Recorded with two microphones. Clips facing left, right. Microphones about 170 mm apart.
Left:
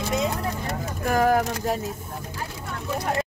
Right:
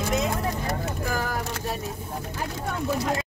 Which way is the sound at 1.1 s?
60° left (ahead or behind).